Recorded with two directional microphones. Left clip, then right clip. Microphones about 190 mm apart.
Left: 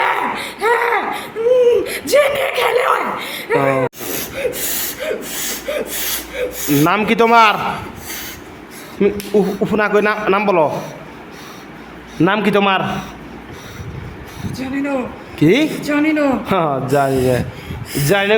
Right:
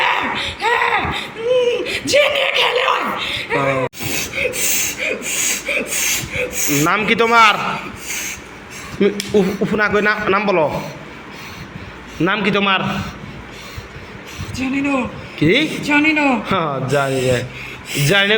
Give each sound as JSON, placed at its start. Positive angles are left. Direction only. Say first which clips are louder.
{"t": 0.0, "sound": "a sound", "louder": "even", "side_deg": 25}
{"t": 6.7, "sound": "speech", "louder": "left 3 dB", "side_deg": 10}
{"t": 6.9, "sound": "a man's voice", "louder": "left 1 dB", "side_deg": 25}
{"t": 9.0, "sound": "a man's voice", "louder": "left 1 dB", "side_deg": 15}
{"t": 12.2, "sound": "a man's voice", "louder": "left 2 dB", "side_deg": 30}
{"t": 15.4, "sound": "a man's voice", "louder": "left 2 dB", "side_deg": 25}